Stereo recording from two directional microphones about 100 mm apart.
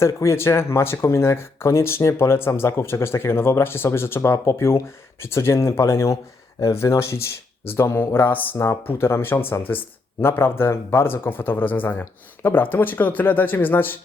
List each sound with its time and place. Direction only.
0.0 s speech: 30° left (ahead or behind)